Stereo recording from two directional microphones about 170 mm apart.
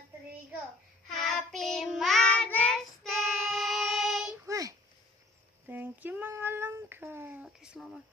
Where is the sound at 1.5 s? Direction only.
Centre (ahead or behind).